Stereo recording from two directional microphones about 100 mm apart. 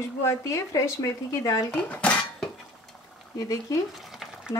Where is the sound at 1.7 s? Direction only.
15° left (ahead or behind).